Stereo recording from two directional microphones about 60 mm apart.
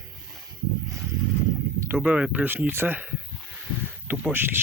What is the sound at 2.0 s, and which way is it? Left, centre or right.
Speech, right.